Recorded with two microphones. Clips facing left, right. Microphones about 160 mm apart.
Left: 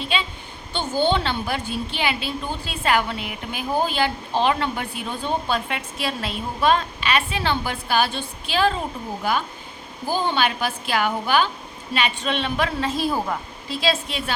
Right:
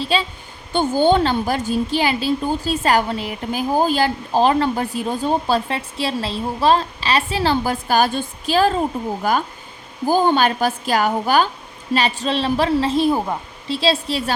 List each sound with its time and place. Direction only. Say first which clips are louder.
0.0 s a woman's voice: right 5 dB; 35° right (ahead or behind)